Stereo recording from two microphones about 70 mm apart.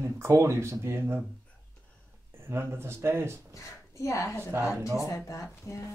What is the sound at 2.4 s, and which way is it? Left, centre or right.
Speech, right.